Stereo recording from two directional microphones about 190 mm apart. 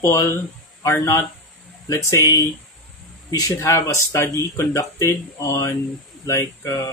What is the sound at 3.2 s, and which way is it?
Speech, 20° left (ahead or behind).